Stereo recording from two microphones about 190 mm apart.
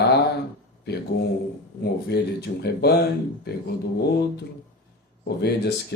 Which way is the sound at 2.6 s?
60° left (ahead or behind).